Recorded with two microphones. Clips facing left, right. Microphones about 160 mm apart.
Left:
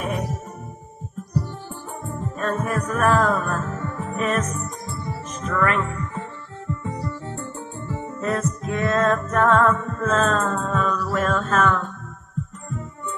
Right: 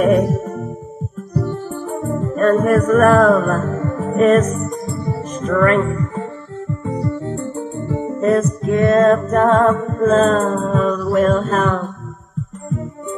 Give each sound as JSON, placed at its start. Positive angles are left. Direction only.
{"t": 0.0, "sound": "music", "side_deg": -55}
{"t": 1.5, "sound": "music", "side_deg": -55}